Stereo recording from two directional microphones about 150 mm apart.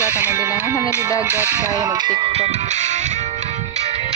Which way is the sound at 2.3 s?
45° right (ahead or behind).